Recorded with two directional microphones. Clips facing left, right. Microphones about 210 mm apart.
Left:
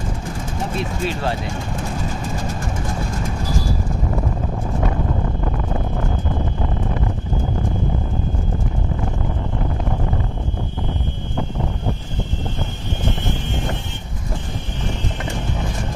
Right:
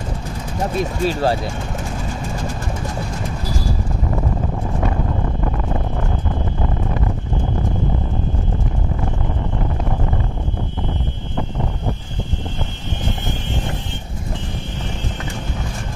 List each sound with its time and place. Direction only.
0.7 s speech: 40° right (ahead or behind)